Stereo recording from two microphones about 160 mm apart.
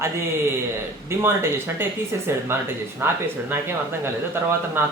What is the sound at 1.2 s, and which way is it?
Speech, 15° right (ahead or behind).